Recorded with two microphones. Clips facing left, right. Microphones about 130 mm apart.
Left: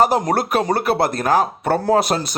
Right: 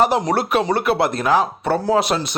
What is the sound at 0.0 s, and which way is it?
Speech, 45° left (ahead or behind).